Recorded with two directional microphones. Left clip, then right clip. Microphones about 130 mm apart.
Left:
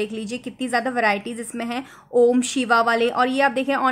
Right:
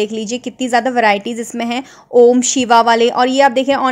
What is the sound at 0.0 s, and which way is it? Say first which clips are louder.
A woman's voice: right 8 dB; 45° right (ahead or behind).